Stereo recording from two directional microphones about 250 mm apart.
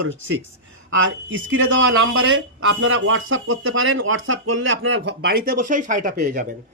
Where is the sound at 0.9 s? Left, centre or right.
Right.